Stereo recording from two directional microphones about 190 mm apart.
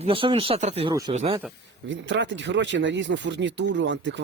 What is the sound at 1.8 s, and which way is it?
Speech, 70° right (ahead or behind).